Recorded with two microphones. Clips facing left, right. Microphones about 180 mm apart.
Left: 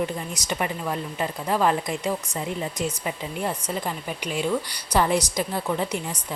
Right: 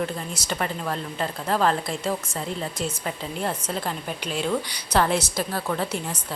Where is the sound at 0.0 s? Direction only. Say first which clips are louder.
Left 1 dB; 15° left (ahead or behind).